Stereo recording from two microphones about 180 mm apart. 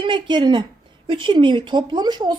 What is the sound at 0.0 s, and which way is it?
Speech, 25° right (ahead or behind).